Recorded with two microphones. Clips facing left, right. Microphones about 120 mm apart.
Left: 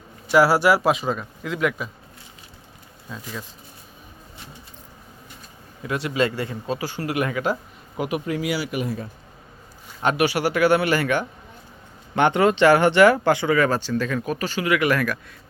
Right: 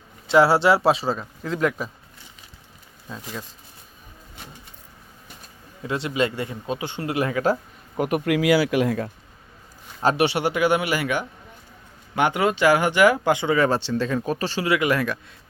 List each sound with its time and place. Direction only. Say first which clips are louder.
0.3 s speech: even; 25° right (ahead or behind)
5.9 s speech: left 1 dB; 25° right (ahead or behind)
7.9 s speech: right 3 dB; 45° right (ahead or behind)
8.2 s speech: right 6 dB; 85° right
10.0 s speech: even; 30° right (ahead or behind)